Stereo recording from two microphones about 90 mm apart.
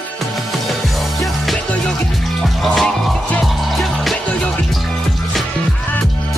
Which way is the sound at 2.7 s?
Centre (ahead or behind).